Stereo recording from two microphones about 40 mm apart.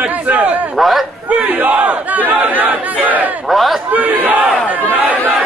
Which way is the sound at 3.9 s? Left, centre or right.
Right.